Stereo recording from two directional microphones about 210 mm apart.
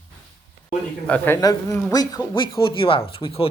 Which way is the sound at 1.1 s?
15° left (ahead or behind).